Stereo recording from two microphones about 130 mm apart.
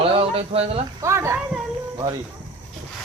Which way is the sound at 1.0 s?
20° right (ahead or behind).